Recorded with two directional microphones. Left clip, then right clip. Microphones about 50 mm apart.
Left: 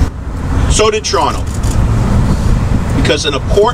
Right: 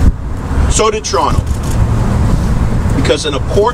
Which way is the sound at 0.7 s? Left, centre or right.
Right.